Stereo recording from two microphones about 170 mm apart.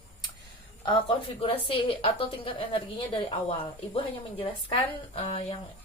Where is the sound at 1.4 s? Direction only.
30° left (ahead or behind).